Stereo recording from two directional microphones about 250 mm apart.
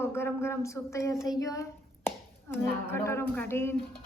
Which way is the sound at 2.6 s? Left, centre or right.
Centre.